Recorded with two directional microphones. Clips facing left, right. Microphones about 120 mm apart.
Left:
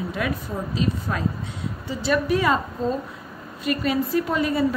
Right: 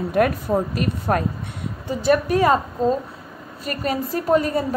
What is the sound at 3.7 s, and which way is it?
A woman's voice, 45° right (ahead or behind).